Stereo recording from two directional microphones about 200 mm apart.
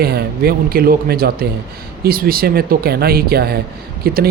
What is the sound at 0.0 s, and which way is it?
Speech, 50° right (ahead or behind).